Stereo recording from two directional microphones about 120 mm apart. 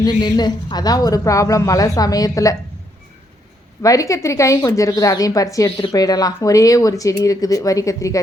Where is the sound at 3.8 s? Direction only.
30° left (ahead or behind).